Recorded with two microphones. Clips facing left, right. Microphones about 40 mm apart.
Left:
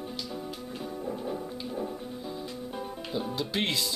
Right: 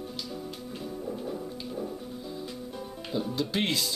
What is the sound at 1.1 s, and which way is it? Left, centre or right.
Music, centre.